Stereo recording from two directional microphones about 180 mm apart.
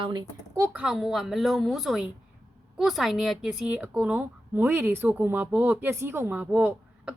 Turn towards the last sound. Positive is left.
turn(degrees=-10)  # may be behind; listen again after turning